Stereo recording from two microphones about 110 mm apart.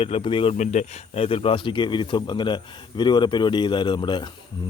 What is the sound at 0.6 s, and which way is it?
Speech, 90° left.